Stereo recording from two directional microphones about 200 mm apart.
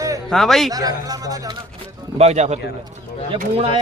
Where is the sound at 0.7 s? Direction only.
20° right (ahead or behind).